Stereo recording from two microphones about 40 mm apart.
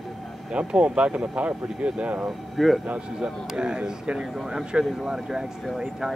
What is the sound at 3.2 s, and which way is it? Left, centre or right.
Speech, right.